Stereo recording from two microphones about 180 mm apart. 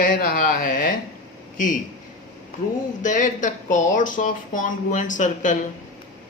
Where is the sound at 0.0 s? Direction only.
50° left (ahead or behind).